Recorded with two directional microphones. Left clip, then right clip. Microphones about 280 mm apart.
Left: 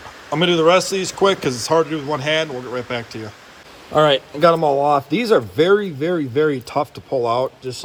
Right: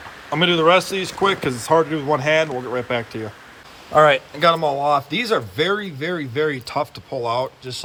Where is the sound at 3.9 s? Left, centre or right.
Centre.